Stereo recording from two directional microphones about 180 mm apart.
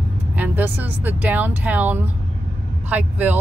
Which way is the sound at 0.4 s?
10° right (ahead or behind).